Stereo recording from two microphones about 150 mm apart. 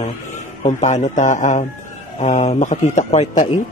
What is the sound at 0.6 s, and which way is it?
A man's voice, 50° left (ahead or behind).